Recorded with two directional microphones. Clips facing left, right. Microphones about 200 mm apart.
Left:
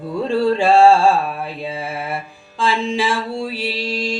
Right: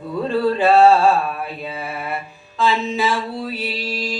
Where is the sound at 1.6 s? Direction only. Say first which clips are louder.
Left 3 dB; 25° left (ahead or behind).